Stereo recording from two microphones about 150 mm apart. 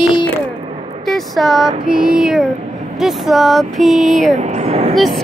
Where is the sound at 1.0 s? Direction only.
Centre (ahead or behind).